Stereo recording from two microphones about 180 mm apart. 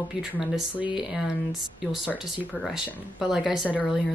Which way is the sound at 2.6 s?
Centre (ahead or behind).